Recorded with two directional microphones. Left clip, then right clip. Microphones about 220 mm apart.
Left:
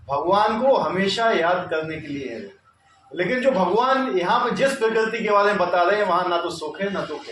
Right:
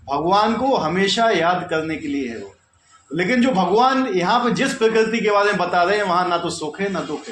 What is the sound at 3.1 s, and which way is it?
A man's voice, 45° right (ahead or behind).